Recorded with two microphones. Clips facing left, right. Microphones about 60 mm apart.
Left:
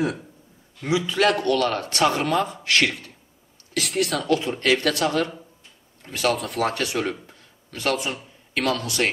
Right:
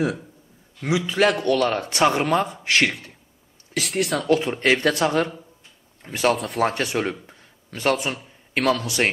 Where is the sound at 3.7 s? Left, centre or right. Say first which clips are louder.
Even; centre.